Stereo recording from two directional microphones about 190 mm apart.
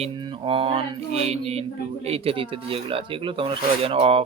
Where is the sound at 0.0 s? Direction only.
25° right (ahead or behind).